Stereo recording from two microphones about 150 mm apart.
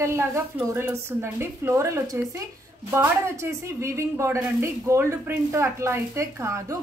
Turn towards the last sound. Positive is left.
turn(degrees=-20)  # may be behind; listen again after turning